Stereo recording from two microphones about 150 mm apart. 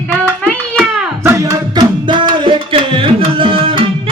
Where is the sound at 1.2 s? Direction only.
20° right (ahead or behind); by 3.8 s 35° right (ahead or behind).